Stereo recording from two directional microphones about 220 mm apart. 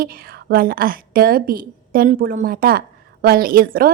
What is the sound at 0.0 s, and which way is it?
A woman's voice, 40° right (ahead or behind).